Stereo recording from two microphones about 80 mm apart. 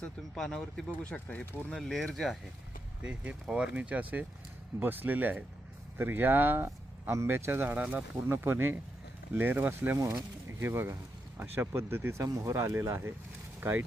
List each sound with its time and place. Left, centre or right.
0.0 s speech: centre
3.0 s speech: centre
8.3 s speech: right
12.2 s speech: right